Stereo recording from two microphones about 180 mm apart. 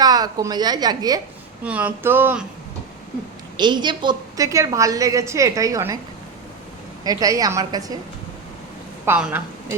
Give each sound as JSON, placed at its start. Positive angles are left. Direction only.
{"t": 0.0, "sound": "a woman's voice", "side_deg": -20}
{"t": 1.6, "sound": "speech", "side_deg": -10}
{"t": 3.6, "sound": "a woman's voice", "side_deg": -25}
{"t": 7.0, "sound": "a woman's voice", "side_deg": -20}
{"t": 9.0, "sound": "speech", "side_deg": -10}